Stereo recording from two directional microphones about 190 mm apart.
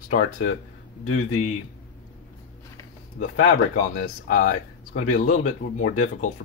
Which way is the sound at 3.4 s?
50° left (ahead or behind).